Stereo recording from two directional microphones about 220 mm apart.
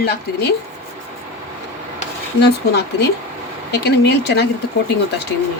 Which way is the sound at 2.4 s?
50° left (ahead or behind).